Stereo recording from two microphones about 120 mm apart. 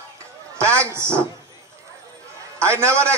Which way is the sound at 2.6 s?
25° right (ahead or behind).